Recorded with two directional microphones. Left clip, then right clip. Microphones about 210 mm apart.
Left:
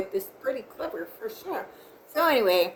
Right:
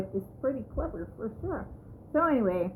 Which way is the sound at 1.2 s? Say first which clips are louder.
Even; 30° left (ahead or behind).